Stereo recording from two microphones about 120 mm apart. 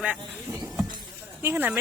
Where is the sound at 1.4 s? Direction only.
20° right (ahead or behind).